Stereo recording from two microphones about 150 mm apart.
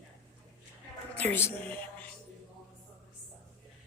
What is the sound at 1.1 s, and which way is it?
Speech, 10° left (ahead or behind).